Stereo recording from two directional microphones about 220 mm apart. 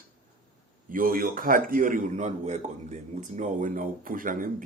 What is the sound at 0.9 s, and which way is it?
A man's voice, 40° right (ahead or behind).